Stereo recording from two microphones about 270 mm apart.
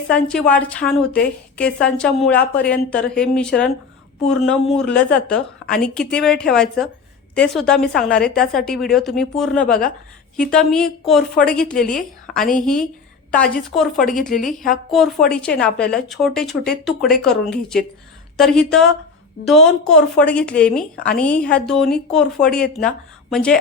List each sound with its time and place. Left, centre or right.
0.3 s speech: centre
14.0 s a woman's voice: left
14.8 s speech: centre